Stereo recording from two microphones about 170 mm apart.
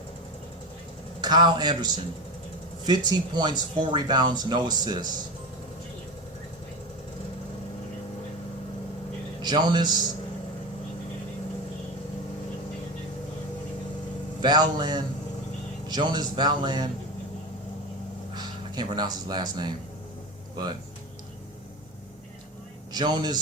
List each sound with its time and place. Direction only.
1.2 s speech: 25° right (ahead or behind)
9.4 s a man's voice: 25° right (ahead or behind)
14.4 s speech: 25° right (ahead or behind)
18.3 s speech: 25° right (ahead or behind)
22.9 s a man's voice: 25° right (ahead or behind)